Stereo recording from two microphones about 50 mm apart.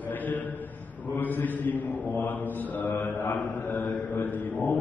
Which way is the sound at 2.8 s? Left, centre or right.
Left.